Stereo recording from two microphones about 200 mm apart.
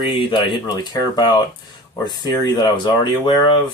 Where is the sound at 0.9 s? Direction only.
20° left (ahead or behind).